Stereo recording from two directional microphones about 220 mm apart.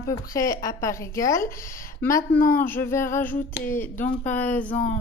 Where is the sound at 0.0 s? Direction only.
15° left (ahead or behind).